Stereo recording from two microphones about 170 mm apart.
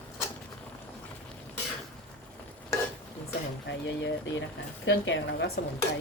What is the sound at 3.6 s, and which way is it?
A woman's voice, 90° left.